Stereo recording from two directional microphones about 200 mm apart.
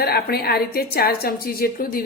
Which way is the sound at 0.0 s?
50° left (ahead or behind).